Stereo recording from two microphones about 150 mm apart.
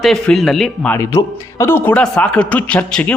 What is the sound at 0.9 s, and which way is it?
A man's voice, 20° left (ahead or behind).